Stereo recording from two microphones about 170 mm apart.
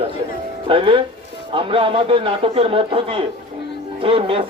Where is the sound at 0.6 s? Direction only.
30° right (ahead or behind).